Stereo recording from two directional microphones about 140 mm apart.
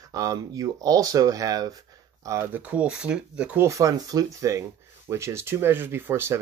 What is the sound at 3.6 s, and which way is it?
Speech, 25° right (ahead or behind).